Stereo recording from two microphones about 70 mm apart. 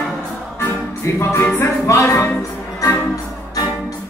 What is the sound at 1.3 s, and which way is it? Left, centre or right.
Music, left.